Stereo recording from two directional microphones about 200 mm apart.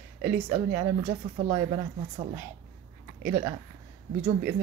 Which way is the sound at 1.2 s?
35° right (ahead or behind).